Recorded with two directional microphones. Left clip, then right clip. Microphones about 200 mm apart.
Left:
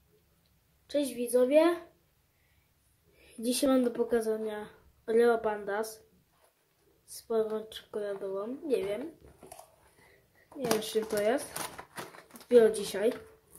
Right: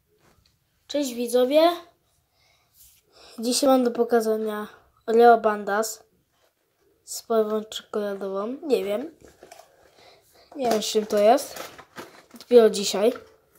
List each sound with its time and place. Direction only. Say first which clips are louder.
0.8 s speech: right 5 dB; 20° right (ahead or behind)
3.3 s speech: right 9 dB; 15° right (ahead or behind)
7.1 s speech: right 8 dB; 20° right (ahead or behind)
10.8 s speech: right 10 dB; 25° right (ahead or behind)